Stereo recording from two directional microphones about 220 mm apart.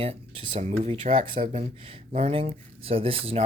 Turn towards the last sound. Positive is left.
turn(degrees=-25)  # may be behind; listen again after turning